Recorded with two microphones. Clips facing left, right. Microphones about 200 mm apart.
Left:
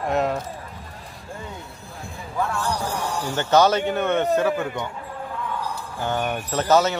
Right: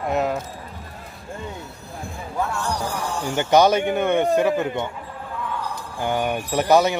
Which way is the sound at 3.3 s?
15° right (ahead or behind).